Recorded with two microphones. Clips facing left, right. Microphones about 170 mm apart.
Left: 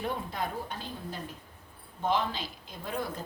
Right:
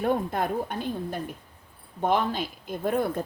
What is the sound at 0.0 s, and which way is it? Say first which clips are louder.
A woman's voice: right 8 dB; 50° right (ahead or behind).